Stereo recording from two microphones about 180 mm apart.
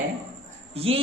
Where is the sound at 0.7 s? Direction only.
35° right (ahead or behind).